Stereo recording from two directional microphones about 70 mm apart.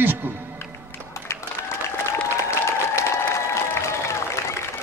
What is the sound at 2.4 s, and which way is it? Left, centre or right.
Applause, left.